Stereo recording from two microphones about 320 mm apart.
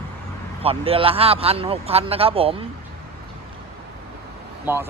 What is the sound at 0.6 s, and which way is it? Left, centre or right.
Speech, centre.